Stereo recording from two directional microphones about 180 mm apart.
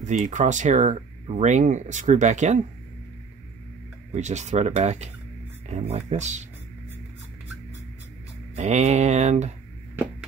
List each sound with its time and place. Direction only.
0.0 s speech: 45° right (ahead or behind)
4.1 s speech: 40° right (ahead or behind)
8.5 s speech: 40° right (ahead or behind)